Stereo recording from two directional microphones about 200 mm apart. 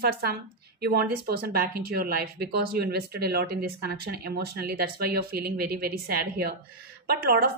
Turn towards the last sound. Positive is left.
turn(degrees=-50)  # may be behind; listen again after turning